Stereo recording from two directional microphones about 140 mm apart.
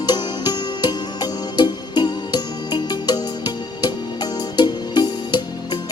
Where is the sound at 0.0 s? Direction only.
30° left (ahead or behind).